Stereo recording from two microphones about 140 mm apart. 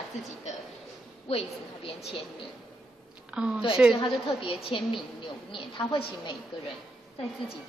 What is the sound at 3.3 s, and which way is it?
Speech, 5° right (ahead or behind).